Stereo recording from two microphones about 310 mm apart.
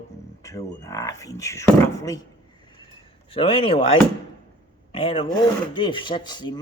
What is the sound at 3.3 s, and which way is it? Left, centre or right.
Speech, centre.